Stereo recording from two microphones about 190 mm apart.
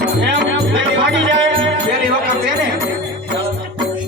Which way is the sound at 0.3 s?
70° right (ahead or behind).